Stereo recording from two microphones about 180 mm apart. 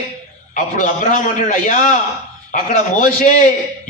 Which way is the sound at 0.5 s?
45° left (ahead or behind).